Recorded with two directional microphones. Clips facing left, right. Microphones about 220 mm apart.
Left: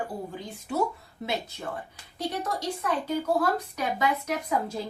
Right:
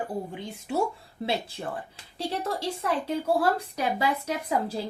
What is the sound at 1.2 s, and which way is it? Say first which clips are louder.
Speech: right 2 dB; 30° right (ahead or behind).